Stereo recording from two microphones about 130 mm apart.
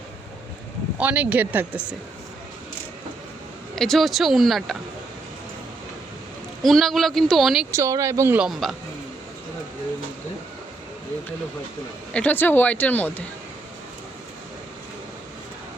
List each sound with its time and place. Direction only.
0.9 s speech: 10° right (ahead or behind)
3.8 s speech: centre (ahead or behind)
6.6 s speech: centre (ahead or behind)
7.7 s speech: 25° right (ahead or behind)
8.4 s speech: centre (ahead or behind)
12.1 s speech: 10° left (ahead or behind)